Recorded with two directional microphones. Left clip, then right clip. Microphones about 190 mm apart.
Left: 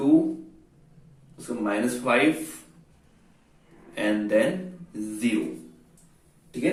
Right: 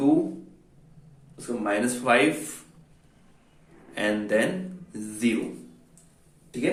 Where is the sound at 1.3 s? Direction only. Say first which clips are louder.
Right 1 dB; 45° right (ahead or behind).